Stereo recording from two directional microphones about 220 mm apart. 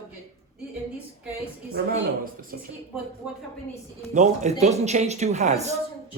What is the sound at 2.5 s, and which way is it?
Speech, 45° right (ahead or behind).